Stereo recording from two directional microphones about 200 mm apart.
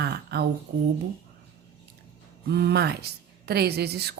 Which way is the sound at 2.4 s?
55° right (ahead or behind).